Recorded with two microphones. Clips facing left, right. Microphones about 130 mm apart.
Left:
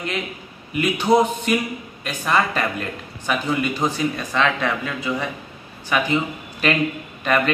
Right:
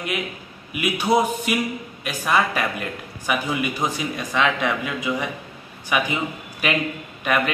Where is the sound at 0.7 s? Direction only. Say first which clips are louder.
Left 3 dB; 10° right (ahead or behind).